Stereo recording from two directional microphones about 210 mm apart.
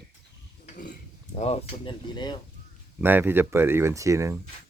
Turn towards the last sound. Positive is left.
turn(degrees=-15)  # may be behind; listen again after turning